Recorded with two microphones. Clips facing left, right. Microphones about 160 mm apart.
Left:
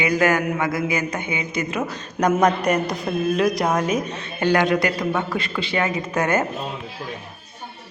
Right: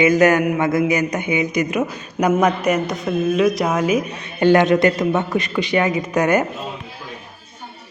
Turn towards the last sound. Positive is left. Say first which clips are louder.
# right 4 dB
turn(degrees=-15)  # may be behind; listen again after turning